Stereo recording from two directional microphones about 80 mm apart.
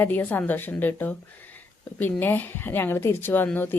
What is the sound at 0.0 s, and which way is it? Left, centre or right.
Speech, left.